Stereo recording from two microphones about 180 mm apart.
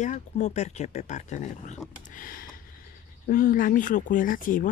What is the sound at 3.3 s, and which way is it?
Speech, 50° left (ahead or behind).